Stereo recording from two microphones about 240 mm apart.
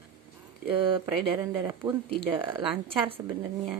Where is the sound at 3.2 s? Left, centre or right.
Centre.